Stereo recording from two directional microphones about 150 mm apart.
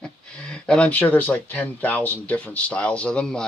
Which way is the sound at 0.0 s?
5° left (ahead or behind).